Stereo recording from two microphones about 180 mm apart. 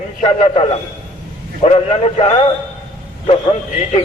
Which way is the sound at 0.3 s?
35° left (ahead or behind).